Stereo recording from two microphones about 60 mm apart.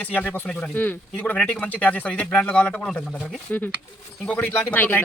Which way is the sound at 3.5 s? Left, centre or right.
Left.